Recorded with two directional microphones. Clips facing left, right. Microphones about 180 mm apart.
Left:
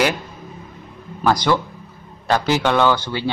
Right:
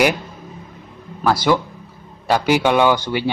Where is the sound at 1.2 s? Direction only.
5° right (ahead or behind).